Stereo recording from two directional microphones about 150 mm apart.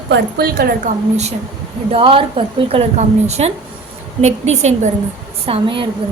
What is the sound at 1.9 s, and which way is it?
A woman's voice, 35° right (ahead or behind).